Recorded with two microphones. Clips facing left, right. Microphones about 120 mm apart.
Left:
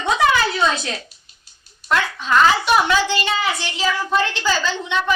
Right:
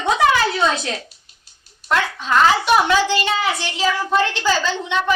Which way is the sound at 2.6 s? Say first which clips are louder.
Right 1 dB; 55° right (ahead or behind).